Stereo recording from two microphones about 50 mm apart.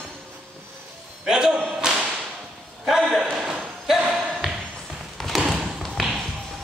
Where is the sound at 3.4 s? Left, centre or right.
Centre.